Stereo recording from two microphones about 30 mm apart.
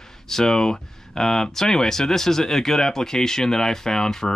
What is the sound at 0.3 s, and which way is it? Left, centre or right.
Speech, centre.